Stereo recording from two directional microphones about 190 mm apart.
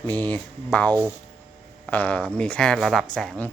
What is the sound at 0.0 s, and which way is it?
A man's voice, 10° left (ahead or behind).